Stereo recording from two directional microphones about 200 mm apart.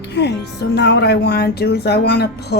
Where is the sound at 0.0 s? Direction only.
55° left (ahead or behind).